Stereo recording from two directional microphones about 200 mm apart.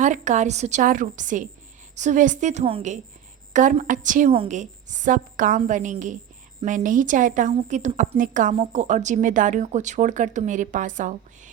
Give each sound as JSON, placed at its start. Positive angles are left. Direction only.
{"t": 0.0, "sound": "a woman's voice", "side_deg": -40}